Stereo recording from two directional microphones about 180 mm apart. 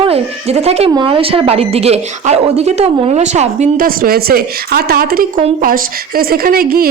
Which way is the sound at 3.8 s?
55° right (ahead or behind).